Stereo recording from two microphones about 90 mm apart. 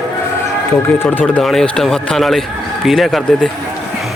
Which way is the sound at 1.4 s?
5° left (ahead or behind).